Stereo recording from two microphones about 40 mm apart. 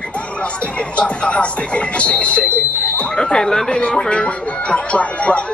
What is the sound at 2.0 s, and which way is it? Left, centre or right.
Speech, left.